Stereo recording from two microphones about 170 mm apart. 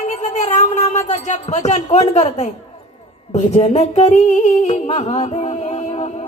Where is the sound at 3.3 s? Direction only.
40° left (ahead or behind).